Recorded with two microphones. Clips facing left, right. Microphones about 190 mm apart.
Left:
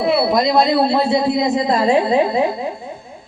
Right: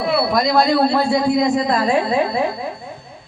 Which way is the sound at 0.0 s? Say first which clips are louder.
Left 2 dB; 20° left (ahead or behind).